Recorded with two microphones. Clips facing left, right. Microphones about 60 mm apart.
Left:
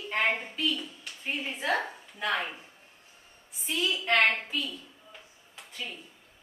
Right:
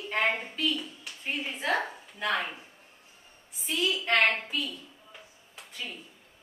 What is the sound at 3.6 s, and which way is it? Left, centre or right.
Speech, centre.